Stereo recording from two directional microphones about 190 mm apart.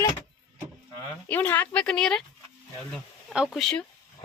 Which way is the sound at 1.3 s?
10° left (ahead or behind).